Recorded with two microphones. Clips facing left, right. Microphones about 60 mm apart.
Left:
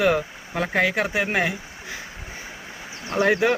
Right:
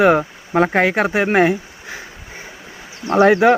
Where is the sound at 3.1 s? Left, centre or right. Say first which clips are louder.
Right 8 dB; right.